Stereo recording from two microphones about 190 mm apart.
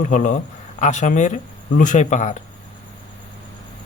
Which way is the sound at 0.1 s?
40° left (ahead or behind).